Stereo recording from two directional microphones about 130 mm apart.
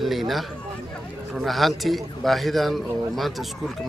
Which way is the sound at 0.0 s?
Centre (ahead or behind).